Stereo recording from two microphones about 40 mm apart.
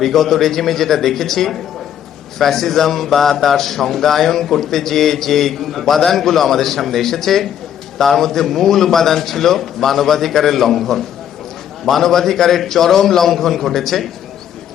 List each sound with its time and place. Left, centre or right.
0.0 s a man's voice: centre